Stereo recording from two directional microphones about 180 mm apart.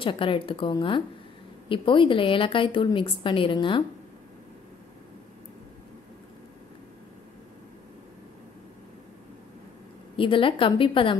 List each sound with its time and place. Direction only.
0.0 s a woman's voice: 30° left (ahead or behind)
10.1 s a woman's voice: 30° left (ahead or behind)